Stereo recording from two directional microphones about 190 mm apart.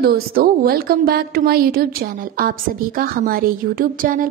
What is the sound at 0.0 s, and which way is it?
A woman's voice, 55° right (ahead or behind).